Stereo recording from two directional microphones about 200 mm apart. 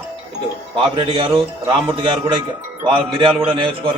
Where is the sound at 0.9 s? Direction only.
25° right (ahead or behind).